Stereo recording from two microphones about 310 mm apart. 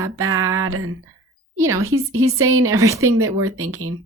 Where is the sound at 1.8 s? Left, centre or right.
Right.